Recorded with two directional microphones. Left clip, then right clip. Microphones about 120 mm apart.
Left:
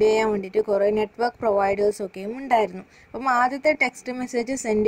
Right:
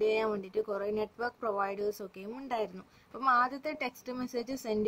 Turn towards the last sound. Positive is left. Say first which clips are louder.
# left 10 dB
turn(degrees=40)  # may be behind; listen again after turning